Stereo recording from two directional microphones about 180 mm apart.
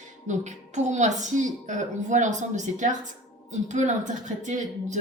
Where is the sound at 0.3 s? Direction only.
40° right (ahead or behind).